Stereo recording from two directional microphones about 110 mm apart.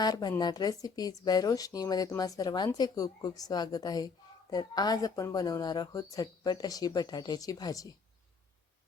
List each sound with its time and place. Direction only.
0.0 s speech: 35° left (ahead or behind)